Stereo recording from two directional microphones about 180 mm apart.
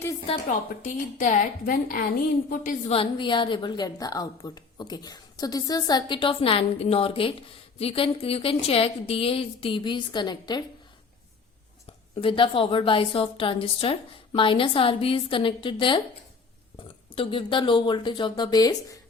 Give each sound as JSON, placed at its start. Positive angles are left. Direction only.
{"t": 0.4, "sound": "a woman's voice", "side_deg": 45}
{"t": 2.9, "sound": "a woman's voice", "side_deg": 30}
{"t": 12.2, "sound": "a woman's voice", "side_deg": 30}